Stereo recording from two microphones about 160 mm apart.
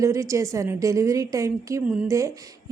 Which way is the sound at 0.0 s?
20° right (ahead or behind).